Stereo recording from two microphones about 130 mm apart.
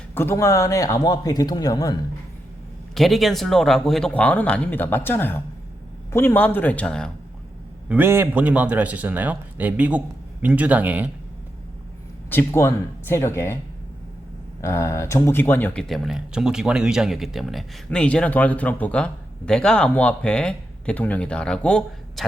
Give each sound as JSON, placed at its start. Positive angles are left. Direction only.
{"t": 0.1, "sound": "speech", "side_deg": 15}
{"t": 2.9, "sound": "speech", "side_deg": 0}
{"t": 7.9, "sound": "a man's voice", "side_deg": -15}
{"t": 12.3, "sound": "speech", "side_deg": 20}
{"t": 14.6, "sound": "speech", "side_deg": 20}